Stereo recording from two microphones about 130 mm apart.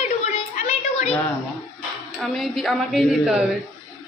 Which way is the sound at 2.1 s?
Centre (ahead or behind).